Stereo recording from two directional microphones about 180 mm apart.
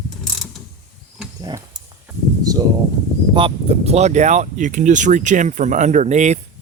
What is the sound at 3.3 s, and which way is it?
Speech, 30° right (ahead or behind).